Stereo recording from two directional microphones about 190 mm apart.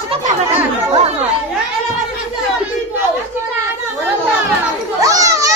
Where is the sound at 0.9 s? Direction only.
30° right (ahead or behind).